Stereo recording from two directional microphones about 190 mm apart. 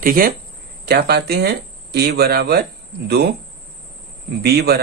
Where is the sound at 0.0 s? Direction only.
50° right (ahead or behind).